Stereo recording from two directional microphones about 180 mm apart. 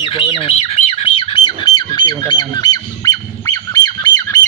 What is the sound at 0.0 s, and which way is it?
Squawk, 30° left (ahead or behind).